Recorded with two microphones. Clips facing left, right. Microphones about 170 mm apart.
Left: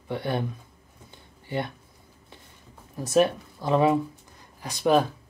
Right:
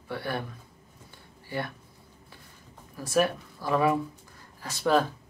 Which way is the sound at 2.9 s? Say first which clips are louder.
Left 4 dB; 20° left (ahead or behind).